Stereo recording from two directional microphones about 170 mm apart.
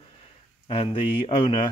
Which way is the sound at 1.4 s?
30° left (ahead or behind).